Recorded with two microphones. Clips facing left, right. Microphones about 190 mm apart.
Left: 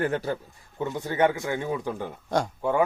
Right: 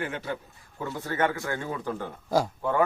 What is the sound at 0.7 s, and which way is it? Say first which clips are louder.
A man's voice: left 4 dB; 20° left (ahead or behind).